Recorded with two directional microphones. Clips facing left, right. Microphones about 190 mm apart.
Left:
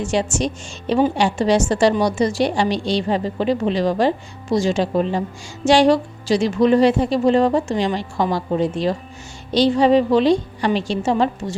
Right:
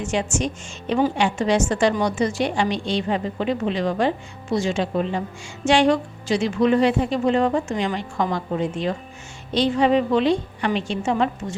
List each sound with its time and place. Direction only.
0.0 s a woman's voice: 35° left (ahead or behind)